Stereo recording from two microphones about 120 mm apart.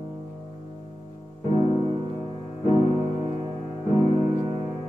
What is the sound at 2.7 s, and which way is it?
Music, 30° right (ahead or behind).